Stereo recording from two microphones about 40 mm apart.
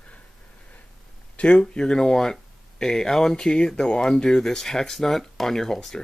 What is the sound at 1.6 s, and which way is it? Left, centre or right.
Speech, centre.